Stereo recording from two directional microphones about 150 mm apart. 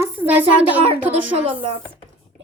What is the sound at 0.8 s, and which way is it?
Speech, 40° right (ahead or behind).